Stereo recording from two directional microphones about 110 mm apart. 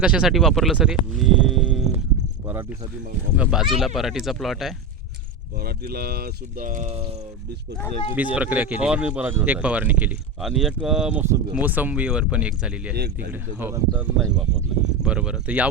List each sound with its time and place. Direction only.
0.0 s speech: 10° right (ahead or behind)
3.3 s speech: 5° right (ahead or behind)
6.8 s speech: 65° right (ahead or behind)
8.1 s speech: 15° right (ahead or behind)
10.4 s speech: centre (ahead or behind)
11.5 s speech: 15° right (ahead or behind)